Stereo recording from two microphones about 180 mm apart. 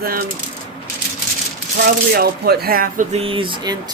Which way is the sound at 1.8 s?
60° right (ahead or behind).